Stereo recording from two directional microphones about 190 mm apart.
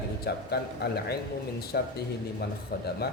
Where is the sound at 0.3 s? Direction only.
55° left (ahead or behind).